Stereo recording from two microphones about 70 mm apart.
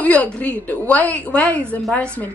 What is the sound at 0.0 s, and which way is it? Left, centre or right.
A woman's voice, left.